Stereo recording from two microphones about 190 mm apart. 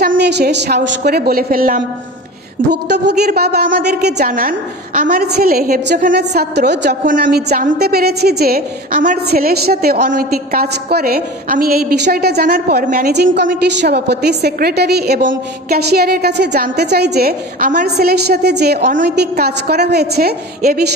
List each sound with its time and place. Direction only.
0.1 s a woman's voice: 60° right (ahead or behind)
2.7 s a woman's voice: 60° right (ahead or behind)
7.1 s a woman's voice: 50° right (ahead or behind)
13.1 s a woman's voice: 65° right (ahead or behind); by 17.8 s 45° right (ahead or behind)
17.8 s a woman's voice: 60° right (ahead or behind)